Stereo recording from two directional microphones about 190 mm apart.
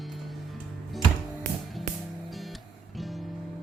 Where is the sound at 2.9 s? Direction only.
Centre (ahead or behind).